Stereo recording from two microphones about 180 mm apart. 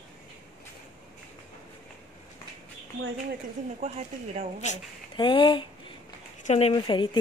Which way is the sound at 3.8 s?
35° right (ahead or behind).